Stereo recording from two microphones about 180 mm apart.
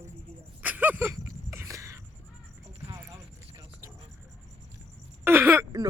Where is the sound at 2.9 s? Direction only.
15° right (ahead or behind).